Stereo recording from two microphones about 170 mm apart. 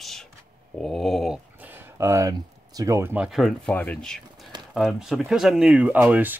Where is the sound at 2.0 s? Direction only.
20° right (ahead or behind).